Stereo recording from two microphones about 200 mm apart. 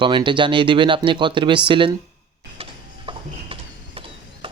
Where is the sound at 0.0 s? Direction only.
25° right (ahead or behind).